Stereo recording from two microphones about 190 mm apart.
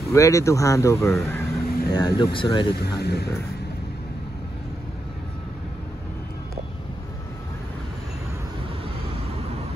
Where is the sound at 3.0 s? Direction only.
60° left (ahead or behind).